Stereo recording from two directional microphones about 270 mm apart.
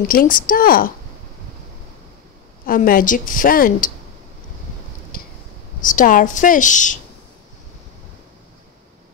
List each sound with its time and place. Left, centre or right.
0.1 s a woman's voice: left
2.6 s a woman's voice: left
5.1 s a sound: left
5.8 s a woman's voice: left